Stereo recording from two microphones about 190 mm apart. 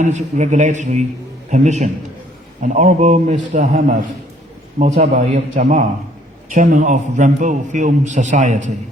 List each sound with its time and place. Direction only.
0.0 s a man's voice: 40° right (ahead or behind)